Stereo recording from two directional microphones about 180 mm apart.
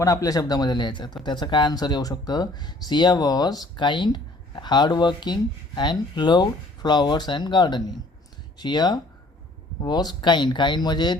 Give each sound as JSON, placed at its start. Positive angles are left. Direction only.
{"t": 0.0, "sound": "speech", "side_deg": 20}